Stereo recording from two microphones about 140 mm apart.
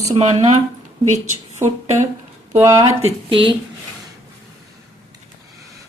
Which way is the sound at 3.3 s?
40° right (ahead or behind).